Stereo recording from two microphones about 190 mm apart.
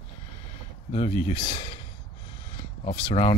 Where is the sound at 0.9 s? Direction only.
30° left (ahead or behind).